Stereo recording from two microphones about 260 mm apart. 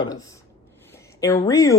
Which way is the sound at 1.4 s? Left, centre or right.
Centre.